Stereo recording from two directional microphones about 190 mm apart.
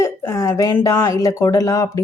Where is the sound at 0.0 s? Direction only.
15° left (ahead or behind).